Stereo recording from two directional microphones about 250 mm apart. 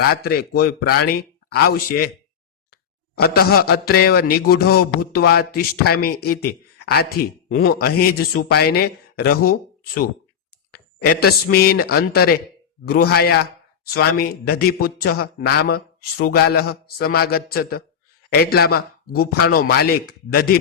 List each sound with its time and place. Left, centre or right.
0.1 s speech: left
3.2 s a man's voice: left